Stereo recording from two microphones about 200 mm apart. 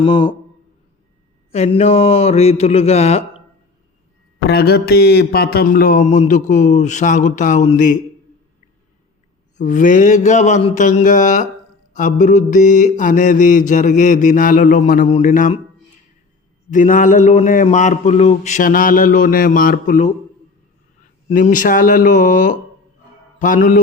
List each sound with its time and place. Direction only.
0.0 s a man's voice: 25° left (ahead or behind)
1.5 s mantra: 30° left (ahead or behind)
4.4 s mantra: 50° left (ahead or behind); by 7.9 s 35° left (ahead or behind)
9.6 s mantra: 40° left (ahead or behind)
16.7 s mantra: 40° left (ahead or behind)
21.2 s mantra: 35° left (ahead or behind)